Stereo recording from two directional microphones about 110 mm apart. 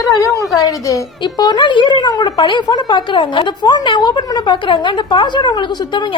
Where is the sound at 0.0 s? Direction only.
30° left (ahead or behind).